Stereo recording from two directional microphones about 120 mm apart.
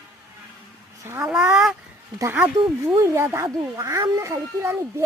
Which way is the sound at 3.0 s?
25° right (ahead or behind).